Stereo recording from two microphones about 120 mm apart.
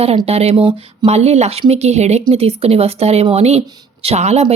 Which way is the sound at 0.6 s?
45° right (ahead or behind).